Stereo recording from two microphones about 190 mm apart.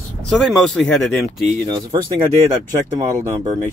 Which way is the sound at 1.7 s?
25° right (ahead or behind).